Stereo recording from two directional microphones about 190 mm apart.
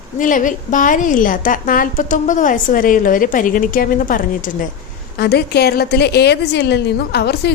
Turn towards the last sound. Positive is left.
turn(degrees=60)  # may be behind; listen again after turning